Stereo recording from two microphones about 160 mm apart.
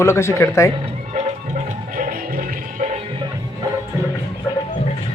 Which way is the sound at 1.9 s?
60° right (ahead or behind).